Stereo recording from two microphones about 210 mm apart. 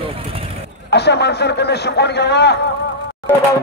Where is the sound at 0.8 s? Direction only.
55° left (ahead or behind).